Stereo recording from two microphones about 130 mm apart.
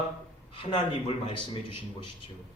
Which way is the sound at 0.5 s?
40° left (ahead or behind).